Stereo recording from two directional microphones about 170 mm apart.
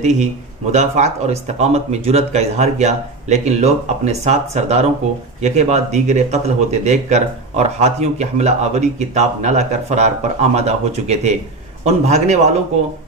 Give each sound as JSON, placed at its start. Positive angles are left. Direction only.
{"t": 0.0, "sound": "a man's voice", "side_deg": -45}